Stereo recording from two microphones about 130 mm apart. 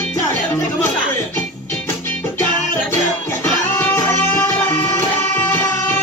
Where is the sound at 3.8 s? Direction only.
20° left (ahead or behind).